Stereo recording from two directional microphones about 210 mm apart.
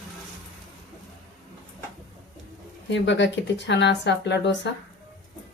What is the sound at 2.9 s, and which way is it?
Speech, 60° left (ahead or behind).